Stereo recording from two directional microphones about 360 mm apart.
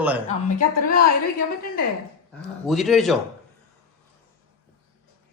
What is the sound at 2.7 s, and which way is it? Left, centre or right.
Speech, centre.